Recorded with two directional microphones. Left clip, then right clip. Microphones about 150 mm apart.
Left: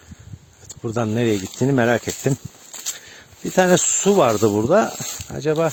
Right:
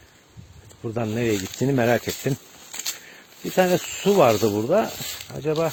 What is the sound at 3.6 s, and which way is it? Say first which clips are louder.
Speech: left 4 dB; 55° left (ahead or behind).